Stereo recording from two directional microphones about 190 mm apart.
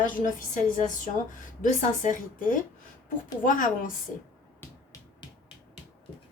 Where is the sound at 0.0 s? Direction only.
45° left (ahead or behind).